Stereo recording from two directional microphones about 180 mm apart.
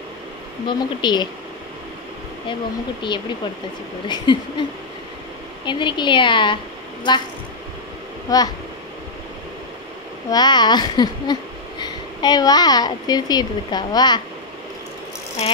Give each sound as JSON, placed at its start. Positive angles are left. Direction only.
{"t": 0.7, "sound": "a woman's voice", "side_deg": 25}
{"t": 4.1, "sound": "a woman's voice", "side_deg": 25}
{"t": 5.7, "sound": "a woman's voice", "side_deg": 25}
{"t": 8.3, "sound": "a woman's voice", "side_deg": 20}
{"t": 10.3, "sound": "a woman's voice", "side_deg": 25}